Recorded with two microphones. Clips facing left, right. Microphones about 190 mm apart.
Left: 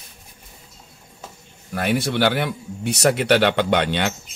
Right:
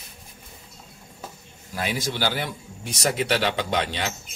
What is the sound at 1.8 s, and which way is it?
Speech, 60° left (ahead or behind).